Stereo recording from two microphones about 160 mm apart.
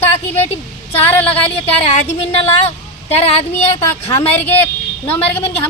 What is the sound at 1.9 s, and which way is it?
Speech, 40° left (ahead or behind).